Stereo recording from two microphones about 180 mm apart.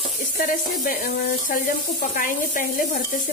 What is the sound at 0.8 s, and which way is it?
Sizzle, 55° left (ahead or behind).